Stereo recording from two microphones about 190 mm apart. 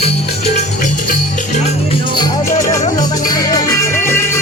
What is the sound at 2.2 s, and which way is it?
Music, 15° left (ahead or behind).